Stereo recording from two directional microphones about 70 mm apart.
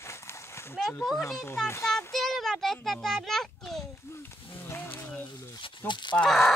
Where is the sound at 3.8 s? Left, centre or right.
Left.